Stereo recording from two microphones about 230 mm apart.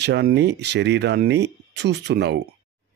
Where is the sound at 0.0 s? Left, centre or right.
Right.